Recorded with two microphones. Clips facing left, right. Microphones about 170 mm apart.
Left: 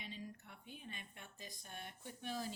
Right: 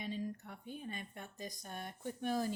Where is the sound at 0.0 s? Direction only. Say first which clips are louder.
Right 10 dB; 45° right (ahead or behind).